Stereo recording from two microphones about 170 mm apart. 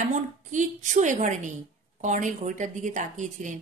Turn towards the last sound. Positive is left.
turn(degrees=-45)  # may be behind; listen again after turning